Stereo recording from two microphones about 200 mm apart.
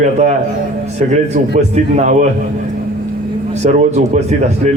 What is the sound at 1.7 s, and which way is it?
Speech, 35° right (ahead or behind).